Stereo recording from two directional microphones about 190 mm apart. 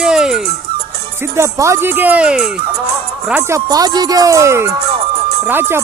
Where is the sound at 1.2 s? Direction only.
15° right (ahead or behind).